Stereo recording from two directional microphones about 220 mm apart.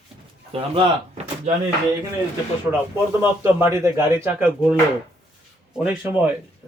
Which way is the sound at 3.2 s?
10° right (ahead or behind).